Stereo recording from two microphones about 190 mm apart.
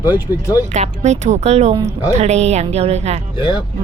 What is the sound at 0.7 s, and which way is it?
A woman's voice, 35° right (ahead or behind).